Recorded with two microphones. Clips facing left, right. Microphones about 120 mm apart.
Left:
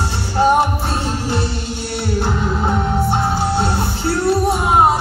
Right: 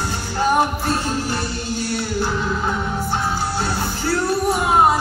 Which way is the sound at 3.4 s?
25° left (ahead or behind).